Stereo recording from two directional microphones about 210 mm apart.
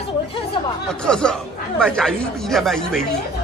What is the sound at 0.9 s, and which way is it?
Speech, 5° left (ahead or behind).